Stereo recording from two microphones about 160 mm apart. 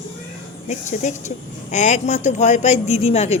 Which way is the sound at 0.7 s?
50° left (ahead or behind).